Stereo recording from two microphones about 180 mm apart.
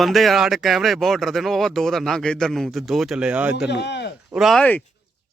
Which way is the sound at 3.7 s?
70° left (ahead or behind).